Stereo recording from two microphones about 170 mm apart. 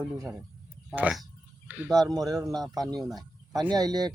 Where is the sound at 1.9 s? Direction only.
20° right (ahead or behind).